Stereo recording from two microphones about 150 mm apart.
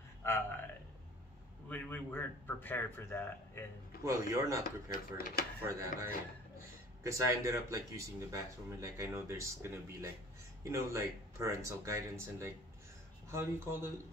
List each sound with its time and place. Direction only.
0.2 s a man's voice: 15° left (ahead or behind)
1.7 s a man's voice: 10° left (ahead or behind)
4.0 s speech: 20° right (ahead or behind)